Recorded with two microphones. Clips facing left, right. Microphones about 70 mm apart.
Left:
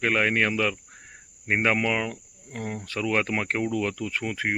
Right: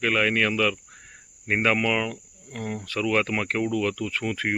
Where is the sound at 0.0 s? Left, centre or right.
Left.